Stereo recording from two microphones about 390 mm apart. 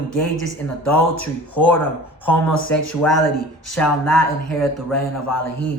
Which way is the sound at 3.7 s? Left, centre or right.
Centre.